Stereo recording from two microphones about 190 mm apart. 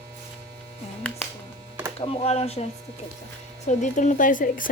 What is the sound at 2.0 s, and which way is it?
Speech, 35° left (ahead or behind).